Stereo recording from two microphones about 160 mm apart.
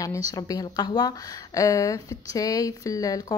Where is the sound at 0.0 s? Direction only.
20° left (ahead or behind).